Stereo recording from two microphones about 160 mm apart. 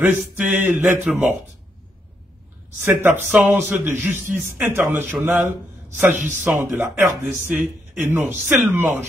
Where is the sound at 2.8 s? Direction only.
15° right (ahead or behind).